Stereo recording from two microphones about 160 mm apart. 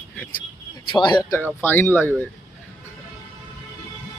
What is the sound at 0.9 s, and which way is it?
Speech, 30° left (ahead or behind).